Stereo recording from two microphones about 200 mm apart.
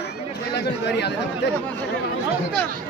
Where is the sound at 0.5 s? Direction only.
60° left (ahead or behind).